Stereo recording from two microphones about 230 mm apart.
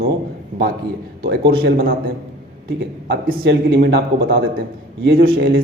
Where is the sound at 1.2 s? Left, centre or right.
Right.